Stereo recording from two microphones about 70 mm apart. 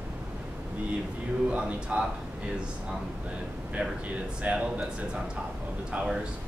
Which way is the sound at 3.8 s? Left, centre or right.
Centre.